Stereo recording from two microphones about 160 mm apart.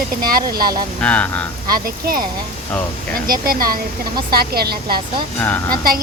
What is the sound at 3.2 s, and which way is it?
Speech, 65° right (ahead or behind).